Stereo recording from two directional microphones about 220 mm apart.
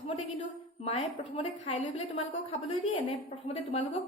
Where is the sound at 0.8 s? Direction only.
30° left (ahead or behind).